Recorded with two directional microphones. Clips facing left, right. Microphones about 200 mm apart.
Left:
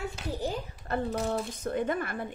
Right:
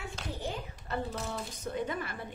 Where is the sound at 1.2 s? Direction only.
50° left (ahead or behind).